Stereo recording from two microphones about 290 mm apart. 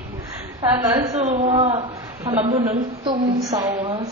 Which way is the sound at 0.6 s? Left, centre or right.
Centre.